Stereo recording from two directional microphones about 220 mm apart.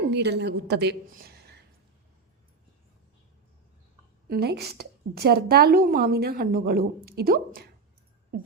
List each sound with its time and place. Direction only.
0.1 s a woman's voice: 50° right (ahead or behind)
4.3 s a woman's voice: 45° right (ahead or behind)